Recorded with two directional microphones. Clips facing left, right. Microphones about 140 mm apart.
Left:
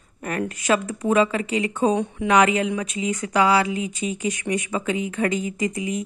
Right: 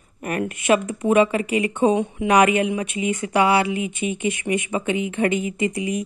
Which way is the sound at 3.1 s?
25° right (ahead or behind).